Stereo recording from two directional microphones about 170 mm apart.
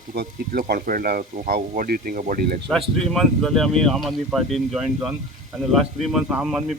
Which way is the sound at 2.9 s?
5° left (ahead or behind).